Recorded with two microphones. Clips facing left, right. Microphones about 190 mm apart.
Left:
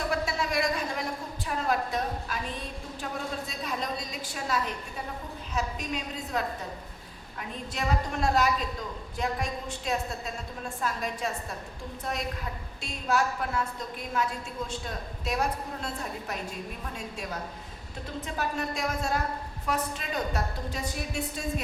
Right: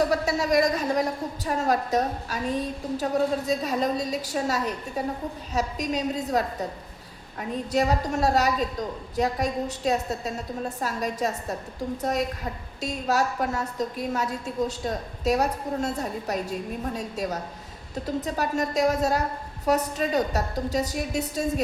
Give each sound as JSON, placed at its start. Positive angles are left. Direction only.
{"t": 0.0, "sound": "a sound", "side_deg": -40}
{"t": 1.5, "sound": "a woman's voice", "side_deg": -40}
{"t": 12.8, "sound": "a woman's voice", "side_deg": -40}